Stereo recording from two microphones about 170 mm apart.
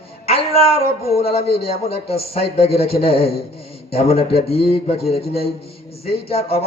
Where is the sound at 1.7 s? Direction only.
35° left (ahead or behind).